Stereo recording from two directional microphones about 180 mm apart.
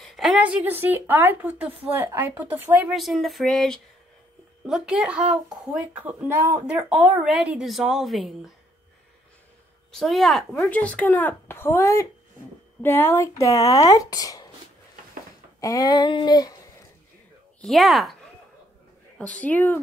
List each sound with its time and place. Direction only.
0.0 s a woman's voice: centre (ahead or behind)
9.8 s speech: centre (ahead or behind); by 14.5 s 20° left (ahead or behind)
15.6 s speech: 20° left (ahead or behind)
17.6 s a woman's voice: centre (ahead or behind)
19.1 s speech: 5° left (ahead or behind)